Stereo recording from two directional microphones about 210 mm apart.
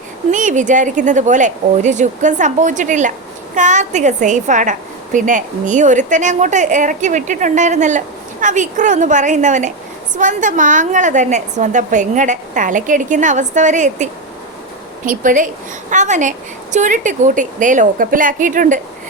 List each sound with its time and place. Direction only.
0.3 s a woman's voice: 35° right (ahead or behind)